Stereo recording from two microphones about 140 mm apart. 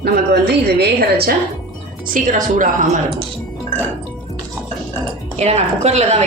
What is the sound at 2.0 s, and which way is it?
Speech, 75° right (ahead or behind).